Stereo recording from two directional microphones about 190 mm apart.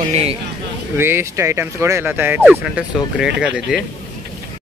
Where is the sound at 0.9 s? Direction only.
10° right (ahead or behind).